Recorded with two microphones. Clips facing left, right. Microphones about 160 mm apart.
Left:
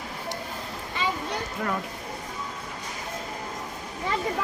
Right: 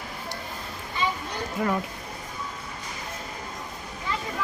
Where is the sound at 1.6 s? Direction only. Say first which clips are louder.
Right 5 dB; 5° right (ahead or behind).